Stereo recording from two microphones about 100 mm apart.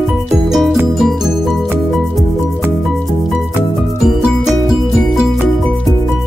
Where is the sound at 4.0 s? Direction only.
5° right (ahead or behind).